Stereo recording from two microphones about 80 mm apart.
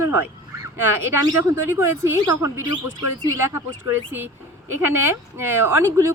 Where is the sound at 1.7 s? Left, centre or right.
Right.